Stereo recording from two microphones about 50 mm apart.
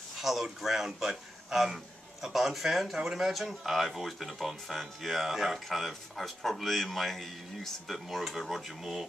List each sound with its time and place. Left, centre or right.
0.2 s speech: centre